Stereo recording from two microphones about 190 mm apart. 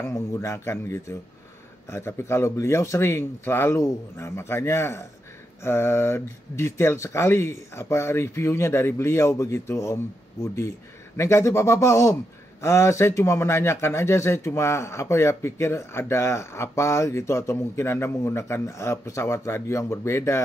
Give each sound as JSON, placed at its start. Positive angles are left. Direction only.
{"t": 0.0, "sound": "speech", "side_deg": 15}